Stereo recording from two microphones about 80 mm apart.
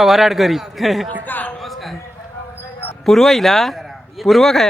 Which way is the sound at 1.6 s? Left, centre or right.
Centre.